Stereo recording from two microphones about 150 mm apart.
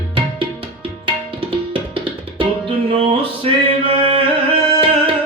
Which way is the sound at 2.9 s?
35° right (ahead or behind).